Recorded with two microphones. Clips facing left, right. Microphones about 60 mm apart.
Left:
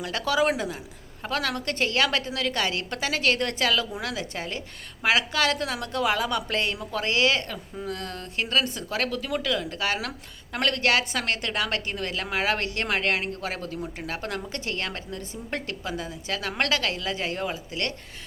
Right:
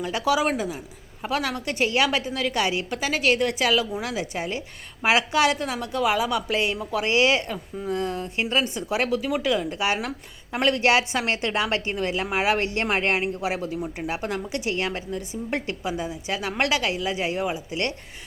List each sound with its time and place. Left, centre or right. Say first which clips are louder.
0.0 s a woman's voice: right 1 dB; centre
13.7 s speech: right 4 dB; centre
14.1 s a woman's voice: right 4 dB; centre